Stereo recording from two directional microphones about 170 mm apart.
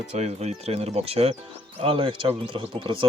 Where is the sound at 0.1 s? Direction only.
40° right (ahead or behind).